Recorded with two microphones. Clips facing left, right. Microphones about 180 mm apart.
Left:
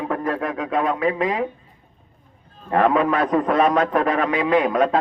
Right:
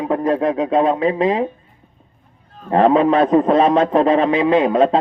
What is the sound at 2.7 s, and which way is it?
A man's voice, 25° right (ahead or behind).